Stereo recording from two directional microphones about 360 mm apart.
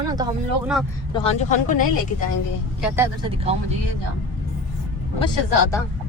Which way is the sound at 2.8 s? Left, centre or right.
Centre.